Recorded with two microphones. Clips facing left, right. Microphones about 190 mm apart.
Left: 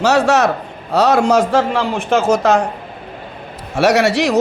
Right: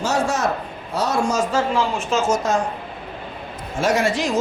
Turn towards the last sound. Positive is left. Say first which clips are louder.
# left 6 dB
turn(degrees=75)  # may be behind; listen again after turning